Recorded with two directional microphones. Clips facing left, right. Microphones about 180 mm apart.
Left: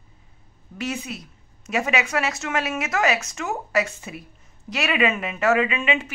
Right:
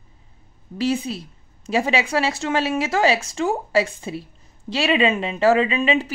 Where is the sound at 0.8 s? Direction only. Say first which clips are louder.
Right 7 dB; 30° right (ahead or behind).